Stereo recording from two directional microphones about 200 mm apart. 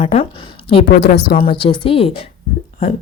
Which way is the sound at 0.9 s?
45° left (ahead or behind).